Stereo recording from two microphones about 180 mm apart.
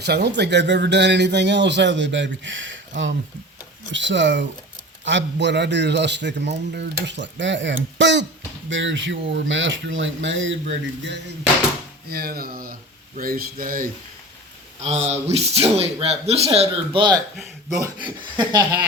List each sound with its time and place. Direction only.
0.0 s a man's voice: 70° right (ahead or behind)
12.0 s speech: 60° right (ahead or behind)
14.8 s speech: 35° right (ahead or behind)